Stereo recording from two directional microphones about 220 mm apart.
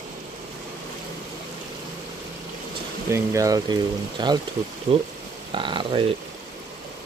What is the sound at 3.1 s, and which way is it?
Speech, 15° right (ahead or behind).